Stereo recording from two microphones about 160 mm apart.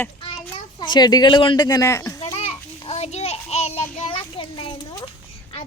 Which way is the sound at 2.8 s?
40° left (ahead or behind).